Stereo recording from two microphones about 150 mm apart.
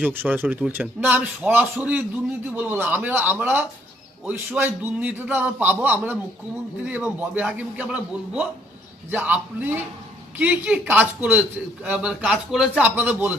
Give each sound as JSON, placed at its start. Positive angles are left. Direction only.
{"t": 0.0, "sound": "a man's voice", "side_deg": -10}